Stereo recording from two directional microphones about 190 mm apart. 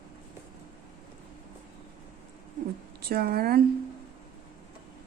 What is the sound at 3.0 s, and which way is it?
Speech, 55° right (ahead or behind).